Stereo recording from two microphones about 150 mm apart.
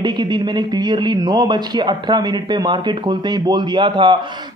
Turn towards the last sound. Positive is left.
turn(degrees=-35)  # may be behind; listen again after turning